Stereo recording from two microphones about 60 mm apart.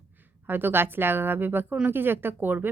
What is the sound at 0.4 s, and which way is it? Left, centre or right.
A woman's voice, right.